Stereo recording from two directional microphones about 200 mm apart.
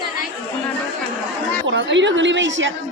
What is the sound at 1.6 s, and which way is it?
A woman's voice, 65° right (ahead or behind).